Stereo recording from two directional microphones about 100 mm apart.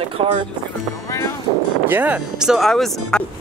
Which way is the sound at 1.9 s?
20° right (ahead or behind).